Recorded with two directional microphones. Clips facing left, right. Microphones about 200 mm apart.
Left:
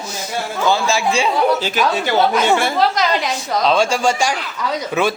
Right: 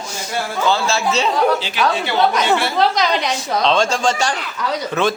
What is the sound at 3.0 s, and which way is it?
A man's voice, centre (ahead or behind).